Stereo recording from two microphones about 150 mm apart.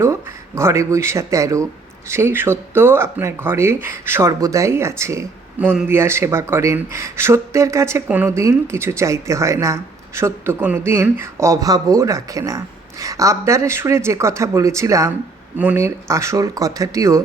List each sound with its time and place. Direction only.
0.0 s speech: 20° right (ahead or behind)